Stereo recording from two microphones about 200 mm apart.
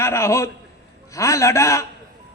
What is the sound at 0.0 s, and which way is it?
A man's voice, 15° left (ahead or behind).